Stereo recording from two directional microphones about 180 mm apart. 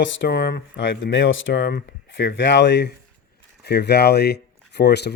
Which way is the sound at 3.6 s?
65° left (ahead or behind).